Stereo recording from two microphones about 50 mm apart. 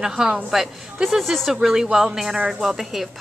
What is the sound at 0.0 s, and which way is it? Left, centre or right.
Speech, centre.